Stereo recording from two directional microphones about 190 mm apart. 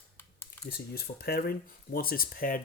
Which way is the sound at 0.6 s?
55° left (ahead or behind).